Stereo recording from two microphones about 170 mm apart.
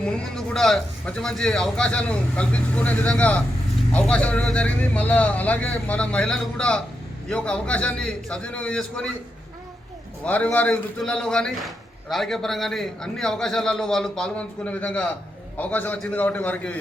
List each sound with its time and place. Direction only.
0.0 s speech: 5° left (ahead or behind)
10.2 s speech: 10° left (ahead or behind)